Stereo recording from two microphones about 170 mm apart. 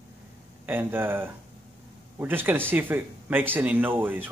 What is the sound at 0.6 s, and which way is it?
Speech, 10° right (ahead or behind).